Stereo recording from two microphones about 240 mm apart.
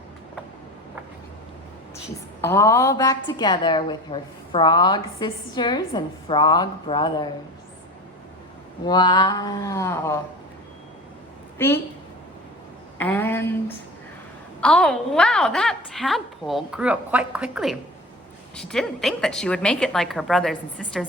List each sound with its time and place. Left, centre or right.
2.4 s a woman's voice: centre
8.9 s a woman's voice: centre
11.5 s a woman's voice: centre
13.0 s a woman's voice: centre